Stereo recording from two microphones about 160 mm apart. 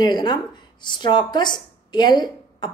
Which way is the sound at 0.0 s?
25° left (ahead or behind).